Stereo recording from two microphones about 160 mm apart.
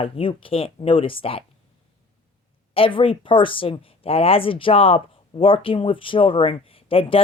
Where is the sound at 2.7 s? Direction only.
35° left (ahead or behind).